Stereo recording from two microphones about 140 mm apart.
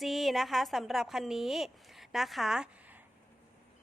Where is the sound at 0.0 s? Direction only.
Centre (ahead or behind).